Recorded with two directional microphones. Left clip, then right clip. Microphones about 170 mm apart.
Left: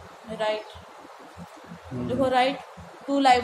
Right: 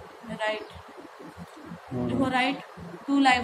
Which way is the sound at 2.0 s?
30° left (ahead or behind).